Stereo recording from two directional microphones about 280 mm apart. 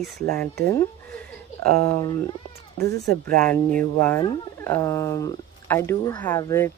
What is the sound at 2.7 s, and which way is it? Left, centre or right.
Speech, centre.